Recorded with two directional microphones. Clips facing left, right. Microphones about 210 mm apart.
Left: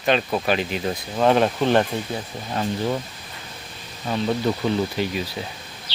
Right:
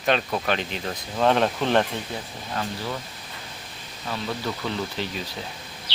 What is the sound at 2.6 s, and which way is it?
Speech, 25° left (ahead or behind).